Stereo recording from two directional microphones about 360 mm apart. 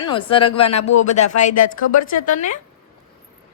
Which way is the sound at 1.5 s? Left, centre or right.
Left.